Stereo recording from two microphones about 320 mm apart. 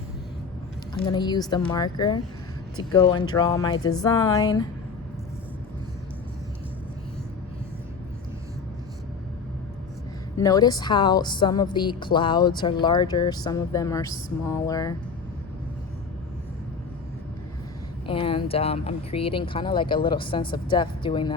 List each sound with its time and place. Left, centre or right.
1.0 s speech: centre
10.3 s speech: centre
18.0 s speech: centre